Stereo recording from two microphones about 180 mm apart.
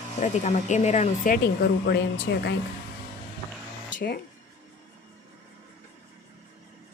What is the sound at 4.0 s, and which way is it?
Speech, 60° left (ahead or behind).